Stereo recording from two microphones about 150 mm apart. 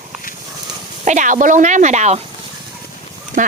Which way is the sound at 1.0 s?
55° right (ahead or behind).